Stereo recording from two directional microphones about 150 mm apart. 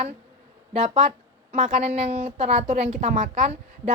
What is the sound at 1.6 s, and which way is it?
A woman's voice, 55° right (ahead or behind).